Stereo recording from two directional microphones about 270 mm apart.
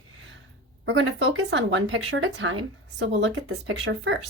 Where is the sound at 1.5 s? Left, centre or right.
Right.